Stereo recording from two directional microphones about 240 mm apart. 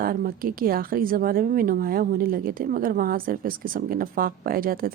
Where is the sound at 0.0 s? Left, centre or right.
Right.